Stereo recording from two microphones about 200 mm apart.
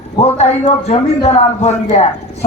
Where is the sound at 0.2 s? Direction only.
30° left (ahead or behind).